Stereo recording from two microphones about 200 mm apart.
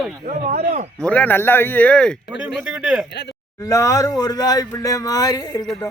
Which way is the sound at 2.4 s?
5° right (ahead or behind).